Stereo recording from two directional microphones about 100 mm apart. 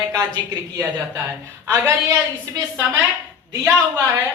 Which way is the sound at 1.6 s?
25° right (ahead or behind).